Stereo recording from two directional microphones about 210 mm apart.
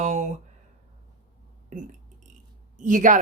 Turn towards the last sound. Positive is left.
turn(degrees=-40)  # may be behind; listen again after turning